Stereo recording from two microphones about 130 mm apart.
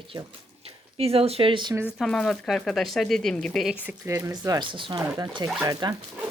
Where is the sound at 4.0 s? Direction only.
20° right (ahead or behind).